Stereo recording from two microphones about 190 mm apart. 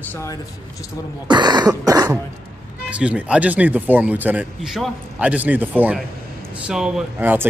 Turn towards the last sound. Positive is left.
turn(degrees=-10)  # may be behind; listen again after turning